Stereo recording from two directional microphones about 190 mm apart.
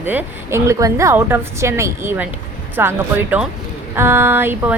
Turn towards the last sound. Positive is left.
turn(degrees=-10)  # may be behind; listen again after turning